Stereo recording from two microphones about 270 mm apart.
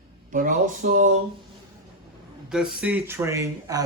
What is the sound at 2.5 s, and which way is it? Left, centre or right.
Speech, centre.